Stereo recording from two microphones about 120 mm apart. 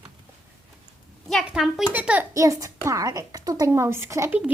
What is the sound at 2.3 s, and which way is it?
A woman's voice, 25° right (ahead or behind).